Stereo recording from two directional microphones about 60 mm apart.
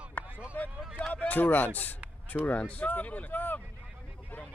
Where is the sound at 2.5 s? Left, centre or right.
Left.